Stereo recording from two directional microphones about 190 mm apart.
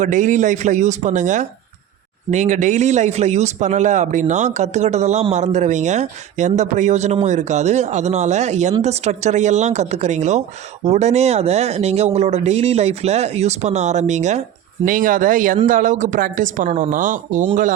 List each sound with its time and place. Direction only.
0.0 s a woman's voice: 40° right (ahead or behind)